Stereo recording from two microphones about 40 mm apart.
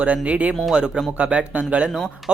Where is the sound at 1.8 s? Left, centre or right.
Centre.